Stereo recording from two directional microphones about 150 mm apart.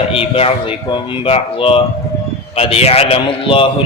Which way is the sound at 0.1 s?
40° left (ahead or behind).